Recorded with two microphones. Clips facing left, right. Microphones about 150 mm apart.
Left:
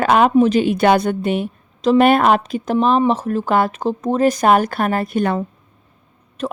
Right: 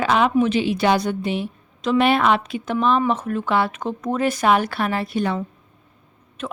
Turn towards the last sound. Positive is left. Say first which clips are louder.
# left 6 dB
turn(degrees=35)  # may be behind; listen again after turning